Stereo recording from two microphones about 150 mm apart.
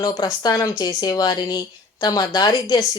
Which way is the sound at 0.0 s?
25° left (ahead or behind).